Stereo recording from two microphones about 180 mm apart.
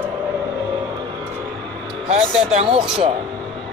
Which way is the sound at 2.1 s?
35° right (ahead or behind).